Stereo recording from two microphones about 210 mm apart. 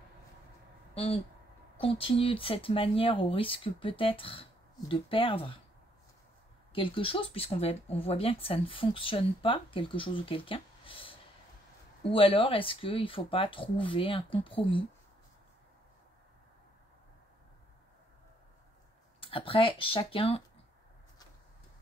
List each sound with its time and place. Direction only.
0.9 s speech: 30° left (ahead or behind)
6.7 s speech: 25° left (ahead or behind)
19.1 s speech: 25° left (ahead or behind)